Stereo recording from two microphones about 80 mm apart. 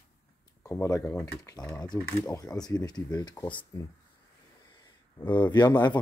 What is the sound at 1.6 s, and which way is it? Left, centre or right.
Speech, left.